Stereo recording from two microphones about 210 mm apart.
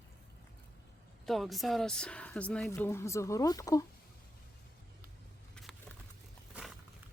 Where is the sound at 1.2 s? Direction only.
Centre (ahead or behind); by 3.8 s 15° left (ahead or behind).